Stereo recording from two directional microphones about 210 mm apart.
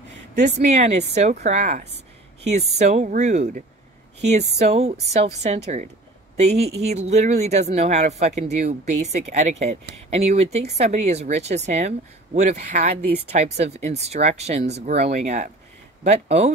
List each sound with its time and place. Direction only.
0.6 s speech: 35° right (ahead or behind)